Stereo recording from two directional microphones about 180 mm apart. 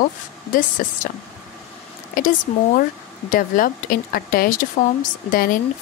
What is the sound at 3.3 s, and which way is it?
A woman's voice, 50° left (ahead or behind).